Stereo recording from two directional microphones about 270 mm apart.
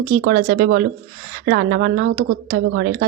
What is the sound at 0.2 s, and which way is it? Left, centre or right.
Speech, right.